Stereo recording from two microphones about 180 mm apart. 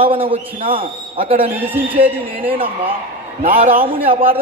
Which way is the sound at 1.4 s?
10° right (ahead or behind).